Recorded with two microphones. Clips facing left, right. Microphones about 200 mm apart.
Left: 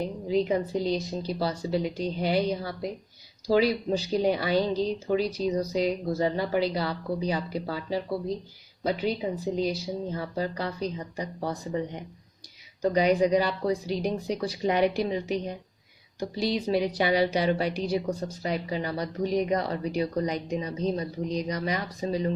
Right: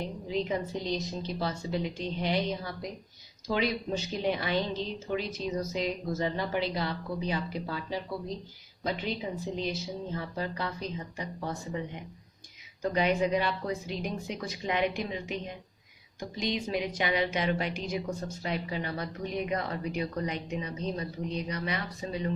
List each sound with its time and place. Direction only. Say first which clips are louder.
0.0 s a woman's voice: left 6 dB; 35° left (ahead or behind)